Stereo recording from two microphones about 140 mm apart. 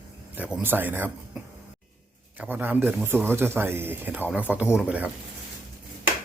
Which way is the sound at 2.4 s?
15° right (ahead or behind).